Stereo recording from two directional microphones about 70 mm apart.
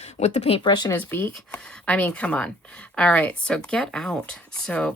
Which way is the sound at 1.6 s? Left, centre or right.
Centre.